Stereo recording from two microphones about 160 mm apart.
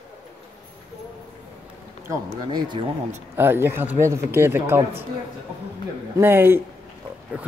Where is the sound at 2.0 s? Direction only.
20° right (ahead or behind).